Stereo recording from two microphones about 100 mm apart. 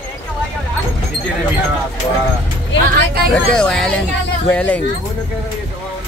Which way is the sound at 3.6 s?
10° left (ahead or behind).